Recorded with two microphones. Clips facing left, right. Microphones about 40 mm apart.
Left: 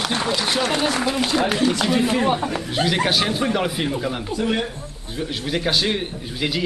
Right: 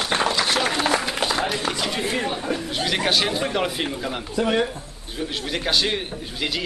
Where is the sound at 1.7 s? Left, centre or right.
Centre.